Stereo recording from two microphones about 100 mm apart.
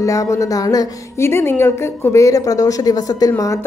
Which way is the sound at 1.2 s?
25° left (ahead or behind).